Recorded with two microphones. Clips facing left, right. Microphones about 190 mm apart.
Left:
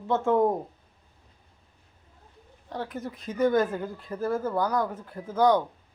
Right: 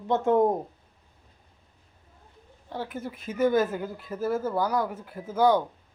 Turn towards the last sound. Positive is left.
turn(degrees=-10)  # may be behind; listen again after turning